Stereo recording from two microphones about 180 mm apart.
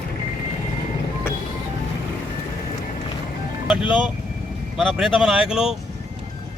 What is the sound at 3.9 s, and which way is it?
Speech, 5° right (ahead or behind).